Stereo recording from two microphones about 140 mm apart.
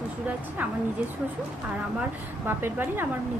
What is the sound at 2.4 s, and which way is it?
Speech, 15° right (ahead or behind).